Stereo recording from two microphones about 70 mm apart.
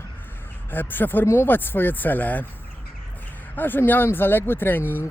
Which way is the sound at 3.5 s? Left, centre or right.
Left.